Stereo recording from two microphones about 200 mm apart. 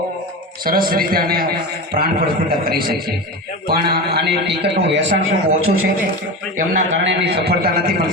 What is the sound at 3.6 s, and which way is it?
A man's voice, 50° right (ahead or behind).